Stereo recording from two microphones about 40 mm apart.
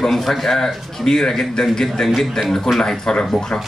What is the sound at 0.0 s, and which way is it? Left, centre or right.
Speech, centre.